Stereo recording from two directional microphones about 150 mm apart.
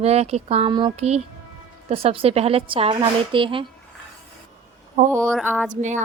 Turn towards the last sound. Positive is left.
turn(degrees=-55)  # may be behind; listen again after turning